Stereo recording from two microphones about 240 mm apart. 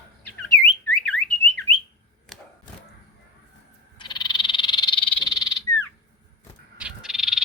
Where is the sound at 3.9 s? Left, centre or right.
Centre.